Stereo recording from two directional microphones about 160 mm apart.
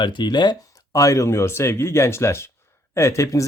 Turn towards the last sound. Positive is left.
turn(degrees=20)  # may be behind; listen again after turning